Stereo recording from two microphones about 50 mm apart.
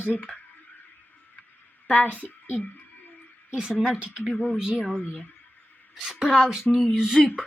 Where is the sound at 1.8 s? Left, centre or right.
Left.